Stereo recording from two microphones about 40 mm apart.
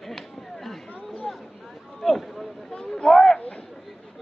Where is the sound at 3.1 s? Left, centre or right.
Centre.